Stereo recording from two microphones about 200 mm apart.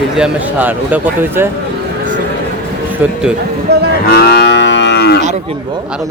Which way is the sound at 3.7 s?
55° right (ahead or behind).